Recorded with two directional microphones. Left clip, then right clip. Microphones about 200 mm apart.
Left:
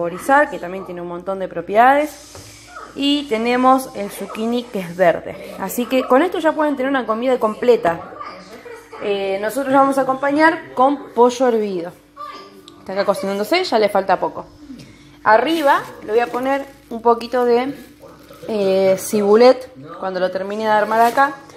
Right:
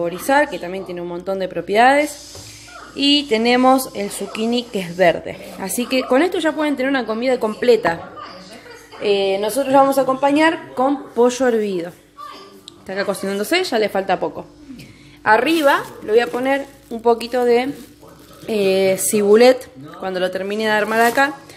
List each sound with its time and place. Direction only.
0.0 s speech: 15° right (ahead or behind)
3.3 s a woman's voice: 20° right (ahead or behind)
5.9 s speech: 5° right (ahead or behind)
9.0 s speech: 10° left (ahead or behind)
9.3 s speech: 15° right (ahead or behind)
10.8 s a woman's voice: 5° right (ahead or behind)
14.0 s a woman's voice: 15° right (ahead or behind)
17.0 s a woman's voice: 5° right (ahead or behind)
20.6 s speech: 40° right (ahead or behind)
20.9 s a woman's voice: 25° right (ahead or behind)